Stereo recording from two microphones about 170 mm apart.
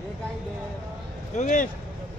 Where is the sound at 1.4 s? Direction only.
50° left (ahead or behind).